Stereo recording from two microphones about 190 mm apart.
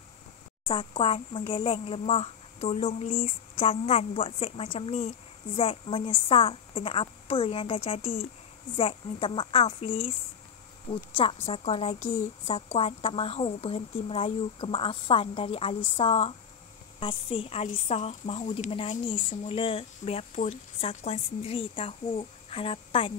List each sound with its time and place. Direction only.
0.7 s a woman's voice: 25° left (ahead or behind)
11.1 s a woman's voice: 30° left (ahead or behind)